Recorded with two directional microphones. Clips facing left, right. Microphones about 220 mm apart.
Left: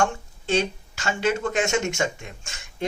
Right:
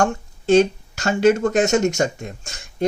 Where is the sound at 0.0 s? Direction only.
45° right (ahead or behind).